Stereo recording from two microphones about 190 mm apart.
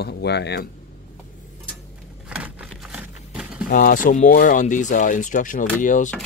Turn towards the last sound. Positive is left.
turn(degrees=40)  # may be behind; listen again after turning